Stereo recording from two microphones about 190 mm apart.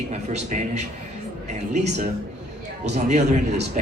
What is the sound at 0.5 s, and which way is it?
Speech, 45° right (ahead or behind).